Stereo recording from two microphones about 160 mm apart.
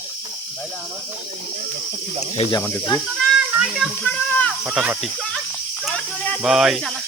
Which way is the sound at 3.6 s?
Centre (ahead or behind).